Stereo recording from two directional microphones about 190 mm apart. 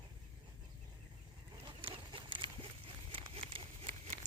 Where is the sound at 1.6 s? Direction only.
25° right (ahead or behind).